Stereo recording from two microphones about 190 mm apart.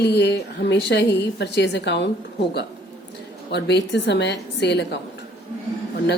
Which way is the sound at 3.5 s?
65° left (ahead or behind).